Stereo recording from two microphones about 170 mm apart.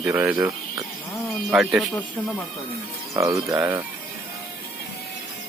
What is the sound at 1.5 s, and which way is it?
Speech, centre (ahead or behind).